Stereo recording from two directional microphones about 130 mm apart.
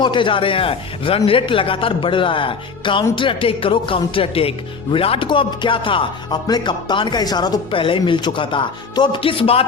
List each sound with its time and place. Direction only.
0.0 s speech: 40° left (ahead or behind)